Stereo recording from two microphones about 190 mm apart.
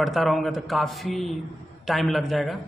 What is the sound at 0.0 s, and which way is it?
A man's voice, centre (ahead or behind).